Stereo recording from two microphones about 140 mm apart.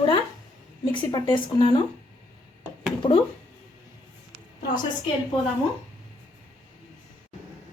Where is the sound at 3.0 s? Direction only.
40° left (ahead or behind).